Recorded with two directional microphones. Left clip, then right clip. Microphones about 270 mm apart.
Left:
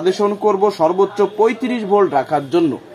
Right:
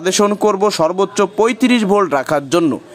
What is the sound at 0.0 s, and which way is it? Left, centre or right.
Speech, right.